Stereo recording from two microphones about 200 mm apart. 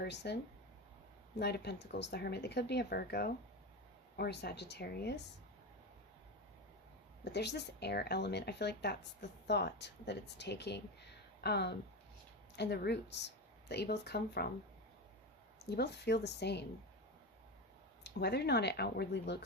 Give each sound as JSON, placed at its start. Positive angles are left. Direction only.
{"t": 0.0, "sound": "speech", "side_deg": 60}
{"t": 1.4, "sound": "speech", "side_deg": 55}
{"t": 7.3, "sound": "speech", "side_deg": 55}
{"t": 15.7, "sound": "speech", "side_deg": 55}
{"t": 18.0, "sound": "speech", "side_deg": 55}